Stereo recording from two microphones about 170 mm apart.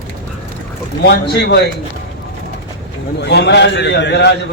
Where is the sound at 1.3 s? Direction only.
75° left (ahead or behind).